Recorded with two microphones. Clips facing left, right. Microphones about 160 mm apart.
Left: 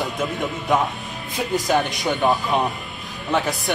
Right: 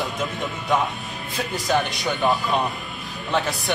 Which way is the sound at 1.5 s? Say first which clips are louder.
Left 3 dB; 20° left (ahead or behind).